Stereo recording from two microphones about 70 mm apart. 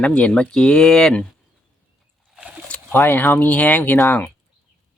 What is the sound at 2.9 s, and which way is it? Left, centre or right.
Speech, left.